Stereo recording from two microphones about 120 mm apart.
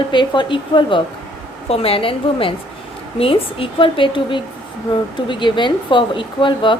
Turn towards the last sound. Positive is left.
turn(degrees=45)  # may be behind; listen again after turning